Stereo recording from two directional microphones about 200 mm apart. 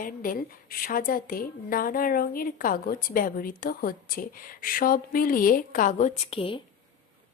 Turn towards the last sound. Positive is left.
turn(degrees=30)  # may be behind; listen again after turning